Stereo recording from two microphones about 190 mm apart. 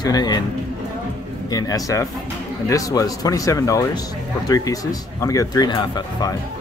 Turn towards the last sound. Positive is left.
turn(degrees=20)  # may be behind; listen again after turning